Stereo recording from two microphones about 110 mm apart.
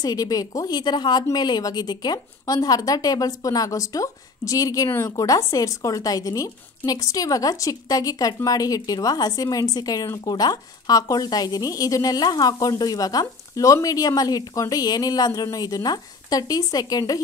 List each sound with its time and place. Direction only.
0.0 s a woman's voice: 35° left (ahead or behind)